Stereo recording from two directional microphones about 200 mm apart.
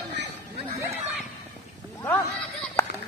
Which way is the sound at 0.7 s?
15° right (ahead or behind).